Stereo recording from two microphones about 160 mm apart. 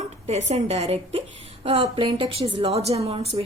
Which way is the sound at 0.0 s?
45° right (ahead or behind).